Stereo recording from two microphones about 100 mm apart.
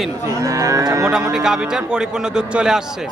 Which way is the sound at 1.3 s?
5° right (ahead or behind).